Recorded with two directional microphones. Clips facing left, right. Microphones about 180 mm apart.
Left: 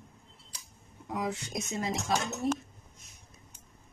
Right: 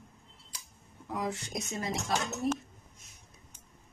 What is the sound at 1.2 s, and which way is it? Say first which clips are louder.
Music: left 1 dB; 25° left (ahead or behind).